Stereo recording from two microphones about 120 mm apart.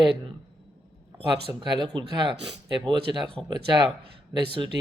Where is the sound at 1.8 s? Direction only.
40° right (ahead or behind).